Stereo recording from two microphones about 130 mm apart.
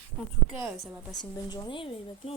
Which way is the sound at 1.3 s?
30° left (ahead or behind).